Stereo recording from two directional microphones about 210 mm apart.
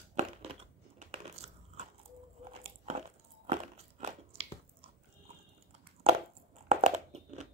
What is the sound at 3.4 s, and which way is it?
Crunch, 30° right (ahead or behind).